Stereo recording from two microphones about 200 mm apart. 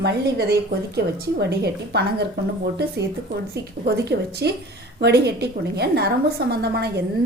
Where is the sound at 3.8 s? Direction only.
55° right (ahead or behind).